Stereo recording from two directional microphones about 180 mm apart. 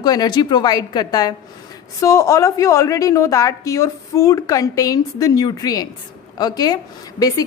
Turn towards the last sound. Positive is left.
turn(degrees=20)  # may be behind; listen again after turning